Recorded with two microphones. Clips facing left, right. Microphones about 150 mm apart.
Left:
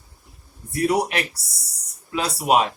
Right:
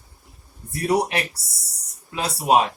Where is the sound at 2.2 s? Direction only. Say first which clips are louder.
Right 1 dB; 30° right (ahead or behind).